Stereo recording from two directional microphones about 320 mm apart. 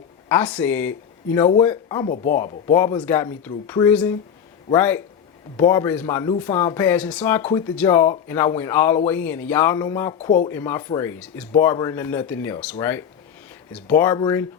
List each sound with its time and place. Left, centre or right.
0.3 s speech: centre
2.0 s speech: left
2.7 s speech: centre